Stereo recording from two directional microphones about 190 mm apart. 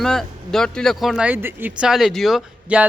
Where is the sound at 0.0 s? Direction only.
Centre (ahead or behind).